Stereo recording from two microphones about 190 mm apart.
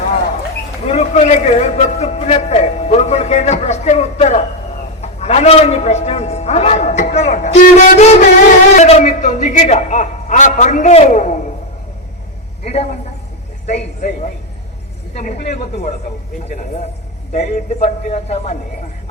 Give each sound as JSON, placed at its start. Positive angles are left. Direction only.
{"t": 0.9, "sound": "a sound", "side_deg": 35}
{"t": 4.9, "sound": "a man's voice", "side_deg": 35}
{"t": 12.7, "sound": "a man's voice", "side_deg": 35}
{"t": 15.2, "sound": "speech", "side_deg": 50}
{"t": 15.7, "sound": "a man's voice", "side_deg": 35}
{"t": 17.3, "sound": "a man's voice", "side_deg": 35}